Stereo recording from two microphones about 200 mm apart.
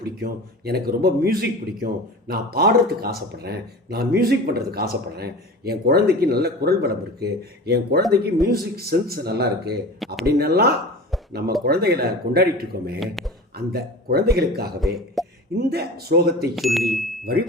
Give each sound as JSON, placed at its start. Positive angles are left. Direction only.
{"t": 0.0, "sound": "speech", "side_deg": -50}
{"t": 13.0, "sound": "a man's voice", "side_deg": 0}
{"t": 13.7, "sound": "speech", "side_deg": -50}
{"t": 14.8, "sound": "a man's voice", "side_deg": 0}
{"t": 15.5, "sound": "speech", "side_deg": -50}
{"t": 16.6, "sound": "a man's voice", "side_deg": 0}